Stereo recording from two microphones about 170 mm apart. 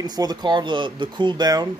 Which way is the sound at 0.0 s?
25° right (ahead or behind).